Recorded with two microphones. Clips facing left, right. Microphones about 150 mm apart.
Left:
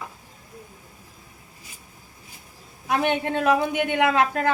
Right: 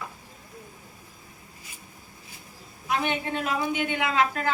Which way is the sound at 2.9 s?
60° left (ahead or behind).